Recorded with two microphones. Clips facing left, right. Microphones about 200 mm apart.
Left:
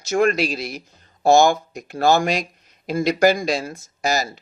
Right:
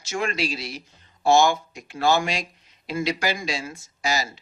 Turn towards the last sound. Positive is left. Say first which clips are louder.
# left 4 dB
turn(degrees=40)  # may be behind; listen again after turning